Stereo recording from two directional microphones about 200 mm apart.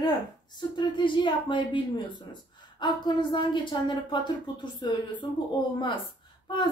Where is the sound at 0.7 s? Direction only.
25° left (ahead or behind).